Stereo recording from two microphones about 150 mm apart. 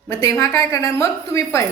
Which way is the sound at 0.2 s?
20° left (ahead or behind).